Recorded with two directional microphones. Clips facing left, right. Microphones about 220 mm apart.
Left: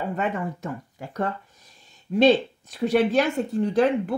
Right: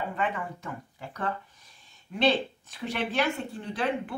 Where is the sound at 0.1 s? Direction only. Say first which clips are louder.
Left 5 dB; 45° left (ahead or behind).